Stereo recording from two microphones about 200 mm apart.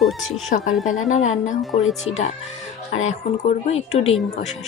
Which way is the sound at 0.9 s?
35° left (ahead or behind).